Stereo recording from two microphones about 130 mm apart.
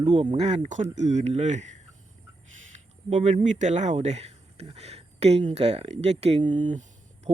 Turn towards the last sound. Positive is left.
turn(degrees=-65)  # may be behind; listen again after turning